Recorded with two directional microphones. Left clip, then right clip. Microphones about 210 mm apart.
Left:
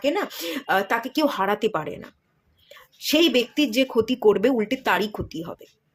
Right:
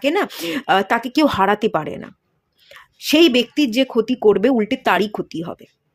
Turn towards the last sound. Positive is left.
turn(degrees=-25)  # may be behind; listen again after turning